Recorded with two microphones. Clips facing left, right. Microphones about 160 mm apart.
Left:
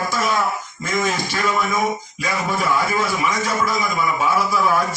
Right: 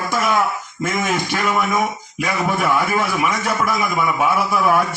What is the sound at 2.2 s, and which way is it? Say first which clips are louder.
A man's voice: right 4 dB; 60° right (ahead or behind).